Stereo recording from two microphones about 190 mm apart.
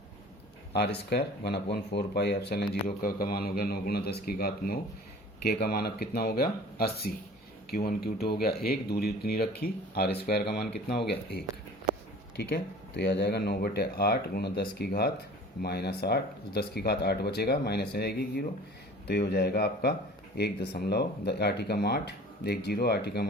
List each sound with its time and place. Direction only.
0.7 s a man's voice: 60° left (ahead or behind)
13.0 s speech: 60° left (ahead or behind)